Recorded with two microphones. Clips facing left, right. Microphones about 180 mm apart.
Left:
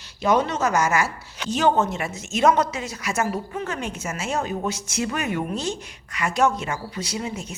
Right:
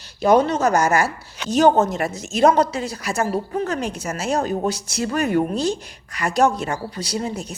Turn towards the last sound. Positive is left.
turn(degrees=-35)  # may be behind; listen again after turning